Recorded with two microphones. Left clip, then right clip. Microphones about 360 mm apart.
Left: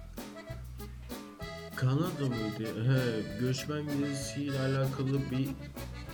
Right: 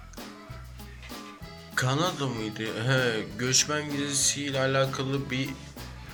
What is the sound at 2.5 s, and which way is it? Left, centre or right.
Speech, right.